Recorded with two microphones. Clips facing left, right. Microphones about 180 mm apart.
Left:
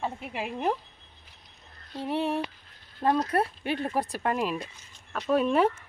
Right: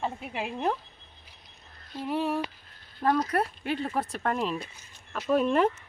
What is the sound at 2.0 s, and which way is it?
Speech, 25° left (ahead or behind).